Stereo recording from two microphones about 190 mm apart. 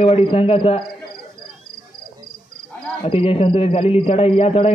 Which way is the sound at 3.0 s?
30° left (ahead or behind).